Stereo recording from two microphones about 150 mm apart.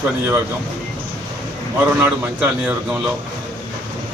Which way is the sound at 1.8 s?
10° right (ahead or behind).